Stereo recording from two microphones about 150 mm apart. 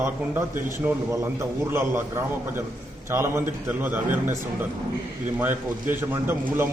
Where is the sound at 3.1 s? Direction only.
15° right (ahead or behind).